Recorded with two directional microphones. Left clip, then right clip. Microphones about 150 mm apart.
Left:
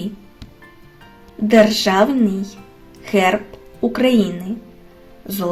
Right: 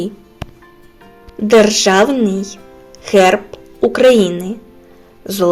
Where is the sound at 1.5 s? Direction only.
45° right (ahead or behind).